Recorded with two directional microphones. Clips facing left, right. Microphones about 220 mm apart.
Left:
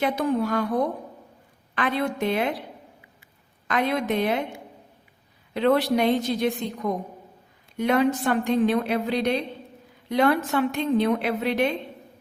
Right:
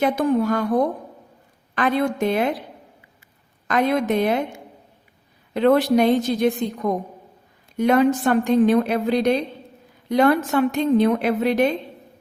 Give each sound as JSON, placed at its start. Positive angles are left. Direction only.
{"t": 0.0, "sound": "a woman's voice", "side_deg": -45}
{"t": 1.7, "sound": "a woman's voice", "side_deg": -45}
{"t": 3.7, "sound": "a woman's voice", "side_deg": -45}